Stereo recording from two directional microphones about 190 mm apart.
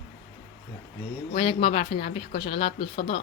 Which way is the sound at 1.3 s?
25° left (ahead or behind).